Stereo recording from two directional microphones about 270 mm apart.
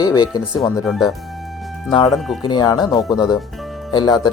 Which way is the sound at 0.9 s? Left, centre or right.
Centre.